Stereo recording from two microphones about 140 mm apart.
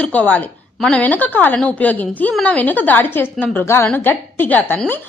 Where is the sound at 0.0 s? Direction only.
10° left (ahead or behind).